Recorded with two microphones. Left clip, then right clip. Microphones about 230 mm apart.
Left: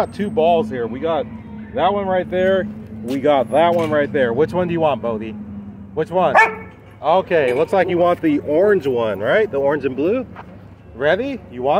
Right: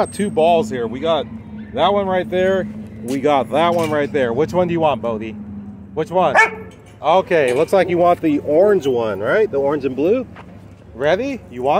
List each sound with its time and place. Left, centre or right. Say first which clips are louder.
0.0 s speech: right 1 dB; right